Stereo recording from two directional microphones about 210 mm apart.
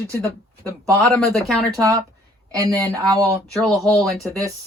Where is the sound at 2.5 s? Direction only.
15° right (ahead or behind).